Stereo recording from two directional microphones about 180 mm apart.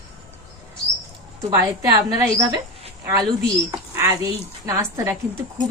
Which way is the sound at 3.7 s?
15° right (ahead or behind).